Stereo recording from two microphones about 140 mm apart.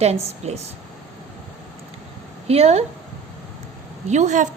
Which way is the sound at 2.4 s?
45° right (ahead or behind).